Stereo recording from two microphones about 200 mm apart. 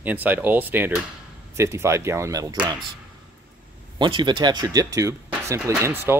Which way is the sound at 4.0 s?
25° right (ahead or behind).